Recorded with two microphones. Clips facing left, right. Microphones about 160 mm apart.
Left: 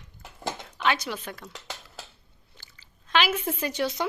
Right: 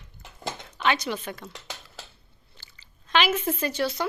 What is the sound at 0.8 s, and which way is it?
Speech, 5° left (ahead or behind).